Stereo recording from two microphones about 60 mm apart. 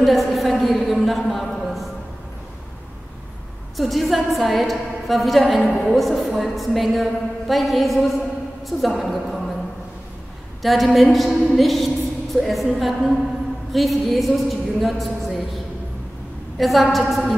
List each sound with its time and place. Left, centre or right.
0.0 s a sound: centre
3.7 s a woman's voice: centre
10.6 s a woman's voice: centre
16.5 s a woman's voice: centre